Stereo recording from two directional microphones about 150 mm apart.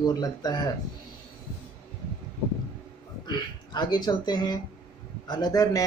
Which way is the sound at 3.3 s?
30° left (ahead or behind).